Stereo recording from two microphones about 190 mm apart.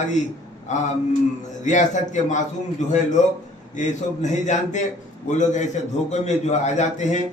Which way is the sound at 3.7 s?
40° left (ahead or behind).